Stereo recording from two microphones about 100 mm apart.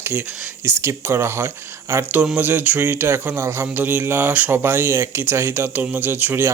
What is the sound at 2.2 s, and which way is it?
Speech, 15° right (ahead or behind).